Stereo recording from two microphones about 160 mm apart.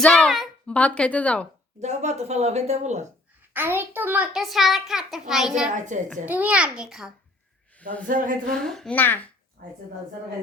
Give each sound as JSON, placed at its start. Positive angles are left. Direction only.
{"t": 0.0, "sound": "speech", "side_deg": 5}
{"t": 1.8, "sound": "speech", "side_deg": -45}
{"t": 3.5, "sound": "a child's voice", "side_deg": -10}
{"t": 5.7, "sound": "speech", "side_deg": -50}
{"t": 6.2, "sound": "a child's voice", "side_deg": -10}
{"t": 8.0, "sound": "speech", "side_deg": -55}
{"t": 8.6, "sound": "a child's voice", "side_deg": 5}
{"t": 9.6, "sound": "speech", "side_deg": -70}